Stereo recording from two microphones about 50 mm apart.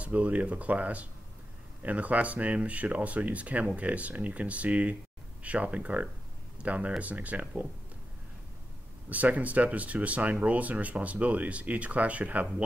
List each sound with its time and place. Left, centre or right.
0.0 s speech: right
9.1 s speech: right